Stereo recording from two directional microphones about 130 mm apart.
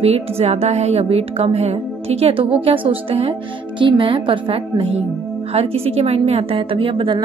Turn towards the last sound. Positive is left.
turn(degrees=-40)  # may be behind; listen again after turning